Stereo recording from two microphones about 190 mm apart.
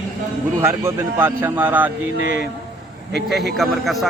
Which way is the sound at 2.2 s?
75° right (ahead or behind).